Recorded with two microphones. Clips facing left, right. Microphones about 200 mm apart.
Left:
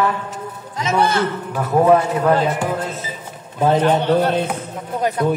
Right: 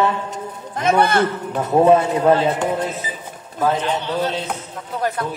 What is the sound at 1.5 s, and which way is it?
Speech, 25° right (ahead or behind).